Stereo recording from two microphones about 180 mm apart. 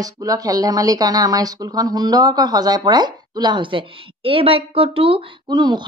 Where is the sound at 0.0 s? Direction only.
20° right (ahead or behind).